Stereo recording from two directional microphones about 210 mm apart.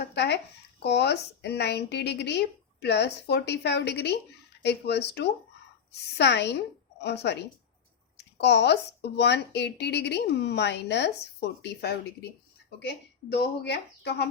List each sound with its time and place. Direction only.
0.1 s a woman's voice: 55° left (ahead or behind)